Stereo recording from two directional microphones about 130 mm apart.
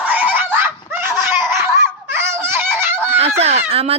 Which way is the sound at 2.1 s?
20° right (ahead or behind).